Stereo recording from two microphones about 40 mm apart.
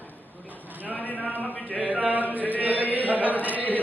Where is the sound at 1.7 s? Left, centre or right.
Right.